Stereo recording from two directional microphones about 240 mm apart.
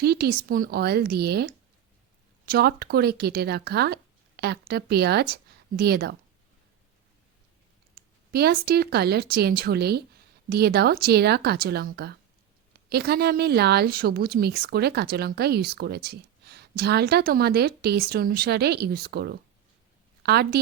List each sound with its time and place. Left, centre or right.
0.0 s a woman's voice: right
8.3 s a woman's voice: right